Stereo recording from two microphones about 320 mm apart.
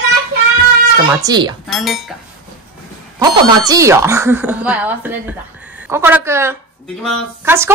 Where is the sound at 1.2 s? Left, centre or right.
Centre.